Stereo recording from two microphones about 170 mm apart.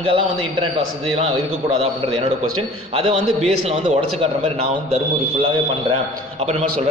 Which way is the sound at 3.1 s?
40° right (ahead or behind).